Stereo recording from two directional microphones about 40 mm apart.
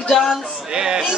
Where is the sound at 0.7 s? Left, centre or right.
Centre.